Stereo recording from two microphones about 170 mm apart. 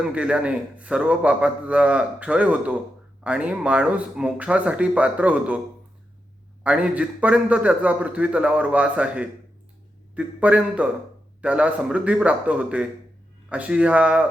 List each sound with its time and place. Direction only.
0.0 s a man's voice: 5° right (ahead or behind)
6.6 s a man's voice: 5° right (ahead or behind)